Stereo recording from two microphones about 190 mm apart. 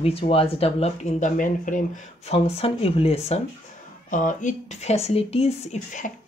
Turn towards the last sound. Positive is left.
turn(degrees=40)  # may be behind; listen again after turning